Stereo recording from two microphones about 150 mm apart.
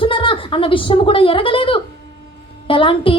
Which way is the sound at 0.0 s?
35° left (ahead or behind).